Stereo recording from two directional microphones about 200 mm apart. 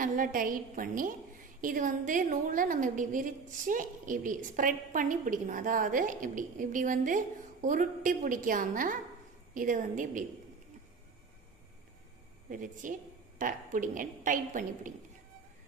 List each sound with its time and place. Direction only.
0.0 s a woman's voice: 45° right (ahead or behind)
12.5 s a woman's voice: 40° right (ahead or behind)